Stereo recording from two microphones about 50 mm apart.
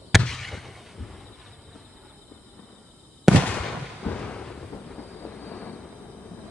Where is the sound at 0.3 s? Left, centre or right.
Centre.